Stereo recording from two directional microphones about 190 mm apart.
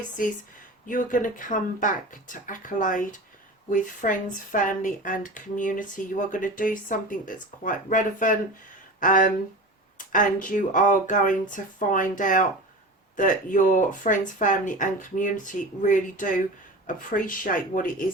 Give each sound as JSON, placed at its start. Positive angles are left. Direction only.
{"t": 0.2, "sound": "speech", "side_deg": 45}